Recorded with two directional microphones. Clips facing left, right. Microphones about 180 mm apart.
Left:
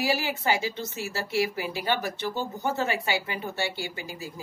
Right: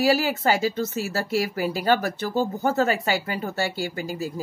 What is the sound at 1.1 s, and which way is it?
Speech, 40° right (ahead or behind).